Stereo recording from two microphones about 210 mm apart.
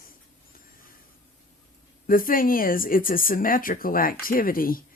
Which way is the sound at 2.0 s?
40° left (ahead or behind).